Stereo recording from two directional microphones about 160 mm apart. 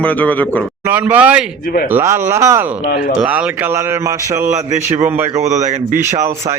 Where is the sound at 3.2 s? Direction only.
10° right (ahead or behind).